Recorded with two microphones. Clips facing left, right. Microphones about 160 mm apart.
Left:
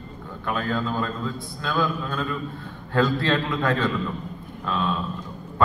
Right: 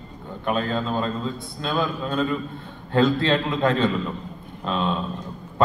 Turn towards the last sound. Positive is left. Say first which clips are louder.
# right 1 dB
turn(degrees=-20)  # may be behind; listen again after turning